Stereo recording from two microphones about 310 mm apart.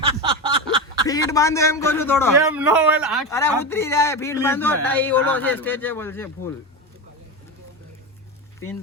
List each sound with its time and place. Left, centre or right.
0.1 s a sound: centre
1.0 s speech: centre
2.6 s a man's voice: centre
3.2 s speech: centre